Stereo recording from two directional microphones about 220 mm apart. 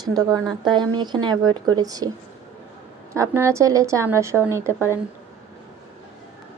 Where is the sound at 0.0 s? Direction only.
15° right (ahead or behind).